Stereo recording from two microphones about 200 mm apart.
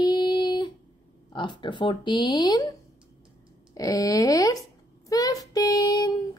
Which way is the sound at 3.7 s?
15° left (ahead or behind).